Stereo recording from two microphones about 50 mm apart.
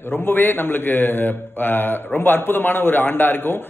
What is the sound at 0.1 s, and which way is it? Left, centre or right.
A man's voice, left.